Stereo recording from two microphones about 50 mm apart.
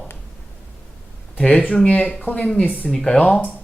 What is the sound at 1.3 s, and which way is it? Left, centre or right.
Speech, left.